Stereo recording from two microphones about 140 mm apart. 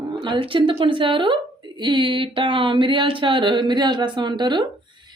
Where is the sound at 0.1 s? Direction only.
35° right (ahead or behind).